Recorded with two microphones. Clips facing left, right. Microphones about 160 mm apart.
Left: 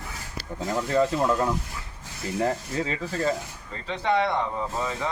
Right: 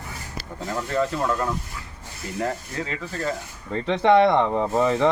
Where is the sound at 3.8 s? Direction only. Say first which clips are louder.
Right 8 dB; 70° right (ahead or behind).